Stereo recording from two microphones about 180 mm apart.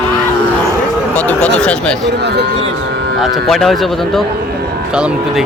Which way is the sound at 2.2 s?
65° right (ahead or behind).